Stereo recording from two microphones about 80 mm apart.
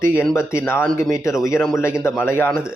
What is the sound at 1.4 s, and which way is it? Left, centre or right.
A man's voice, left.